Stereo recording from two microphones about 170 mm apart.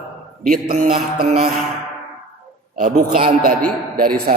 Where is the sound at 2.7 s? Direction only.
55° right (ahead or behind).